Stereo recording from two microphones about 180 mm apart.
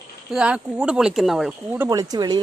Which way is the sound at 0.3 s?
5° right (ahead or behind).